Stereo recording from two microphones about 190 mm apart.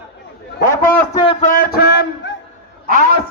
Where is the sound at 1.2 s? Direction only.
30° left (ahead or behind).